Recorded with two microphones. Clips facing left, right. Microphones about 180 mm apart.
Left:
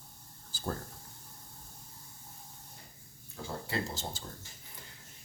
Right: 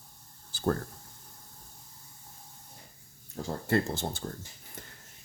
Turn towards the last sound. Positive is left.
turn(degrees=-60)  # may be behind; listen again after turning